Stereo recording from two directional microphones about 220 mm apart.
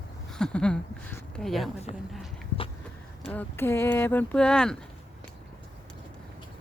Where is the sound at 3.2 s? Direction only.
5° left (ahead or behind).